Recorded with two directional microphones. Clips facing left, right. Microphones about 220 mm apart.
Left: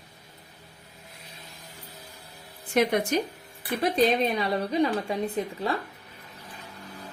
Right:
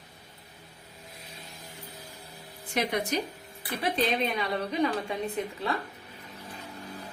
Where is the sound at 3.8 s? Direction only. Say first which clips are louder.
Left 5 dB; 40° left (ahead or behind).